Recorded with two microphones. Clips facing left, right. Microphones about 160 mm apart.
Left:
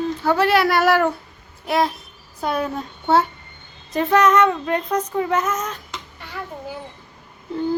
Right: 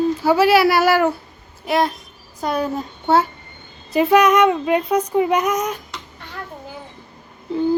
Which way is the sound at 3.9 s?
10° right (ahead or behind).